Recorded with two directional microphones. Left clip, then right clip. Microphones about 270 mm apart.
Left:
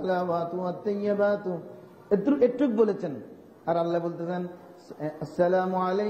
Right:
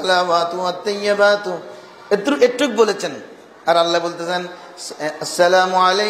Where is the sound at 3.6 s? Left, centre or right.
Centre.